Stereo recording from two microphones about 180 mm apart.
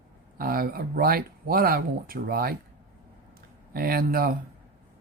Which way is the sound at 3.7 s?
55° right (ahead or behind).